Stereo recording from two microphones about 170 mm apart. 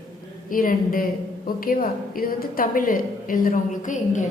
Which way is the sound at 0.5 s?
55° left (ahead or behind).